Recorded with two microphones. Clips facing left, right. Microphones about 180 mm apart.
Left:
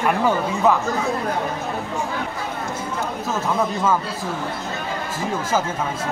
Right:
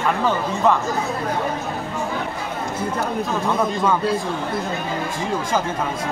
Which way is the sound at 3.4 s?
5° left (ahead or behind).